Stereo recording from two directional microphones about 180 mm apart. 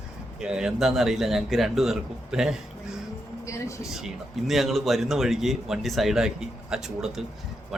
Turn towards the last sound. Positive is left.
turn(degrees=0)  # may be behind; listen again after turning